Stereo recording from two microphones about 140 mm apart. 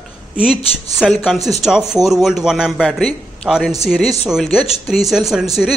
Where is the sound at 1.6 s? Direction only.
5° right (ahead or behind).